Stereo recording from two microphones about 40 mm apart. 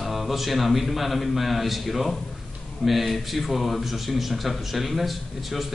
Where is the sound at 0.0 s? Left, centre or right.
Centre.